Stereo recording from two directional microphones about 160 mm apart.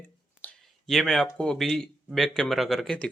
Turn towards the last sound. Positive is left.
turn(degrees=5)  # may be behind; listen again after turning